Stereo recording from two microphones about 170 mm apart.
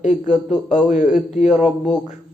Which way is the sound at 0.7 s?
45° left (ahead or behind).